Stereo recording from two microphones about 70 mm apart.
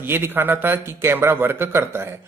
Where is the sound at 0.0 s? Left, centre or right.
Right.